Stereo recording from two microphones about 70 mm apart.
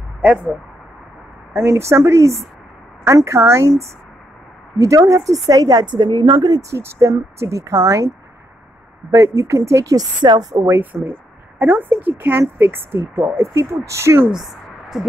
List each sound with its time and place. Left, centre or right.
0.2 s speech: centre
1.5 s a woman's voice: right
6.7 s speech: right
9.1 s speech: right
9.9 s a woman's voice: right
10.5 s speech: right
11.1 s a woman's voice: right
14.3 s a sound: centre